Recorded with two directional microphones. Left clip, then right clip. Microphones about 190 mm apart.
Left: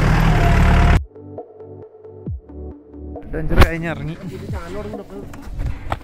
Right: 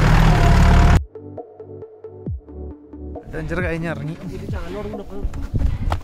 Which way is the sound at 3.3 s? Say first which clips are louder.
Left 5 dB; centre (ahead or behind).